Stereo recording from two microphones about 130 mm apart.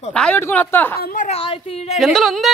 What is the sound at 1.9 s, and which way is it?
Speech, centre (ahead or behind).